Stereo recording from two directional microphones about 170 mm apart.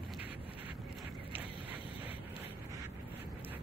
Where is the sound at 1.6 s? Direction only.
30° left (ahead or behind).